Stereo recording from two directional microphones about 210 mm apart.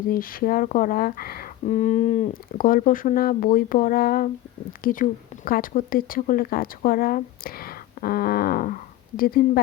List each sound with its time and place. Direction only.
0.1 s a woman's voice: 40° left (ahead or behind)